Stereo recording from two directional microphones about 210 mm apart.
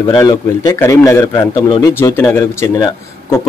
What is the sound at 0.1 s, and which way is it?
Speech, 15° left (ahead or behind).